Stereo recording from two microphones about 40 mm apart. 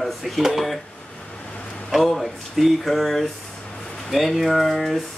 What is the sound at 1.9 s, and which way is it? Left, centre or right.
Speech, centre.